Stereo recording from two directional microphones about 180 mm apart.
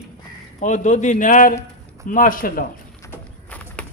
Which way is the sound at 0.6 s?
40° left (ahead or behind).